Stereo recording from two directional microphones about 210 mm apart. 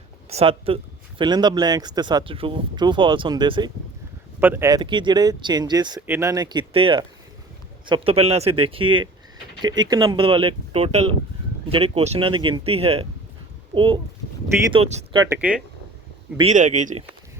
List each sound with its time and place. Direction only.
0.3 s speech: 30° right (ahead or behind)
4.4 s speech: 10° right (ahead or behind); by 15.0 s 30° right (ahead or behind)
15.1 s speech: 20° right (ahead or behind)
15.4 s speech: 5° right (ahead or behind)
16.4 s speech: 35° right (ahead or behind)